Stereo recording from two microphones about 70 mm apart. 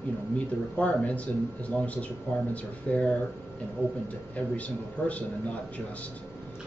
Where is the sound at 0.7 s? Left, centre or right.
Left.